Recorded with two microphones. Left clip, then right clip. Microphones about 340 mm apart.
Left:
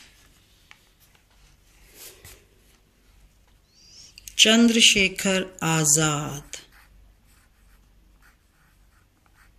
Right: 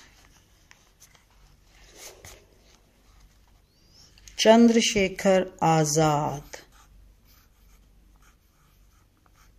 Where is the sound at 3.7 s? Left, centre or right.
Right.